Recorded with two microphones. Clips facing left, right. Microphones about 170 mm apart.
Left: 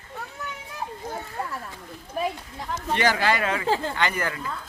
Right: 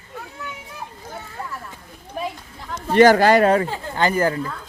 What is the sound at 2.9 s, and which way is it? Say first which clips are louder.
A woman's voice: right 11 dB; 45° right (ahead or behind).